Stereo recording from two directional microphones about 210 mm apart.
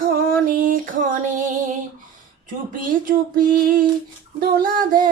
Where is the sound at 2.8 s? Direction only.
40° right (ahead or behind).